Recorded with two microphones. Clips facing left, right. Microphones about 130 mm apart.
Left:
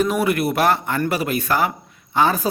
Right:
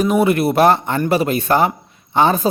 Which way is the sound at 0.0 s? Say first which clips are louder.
Right 4 dB; 20° right (ahead or behind).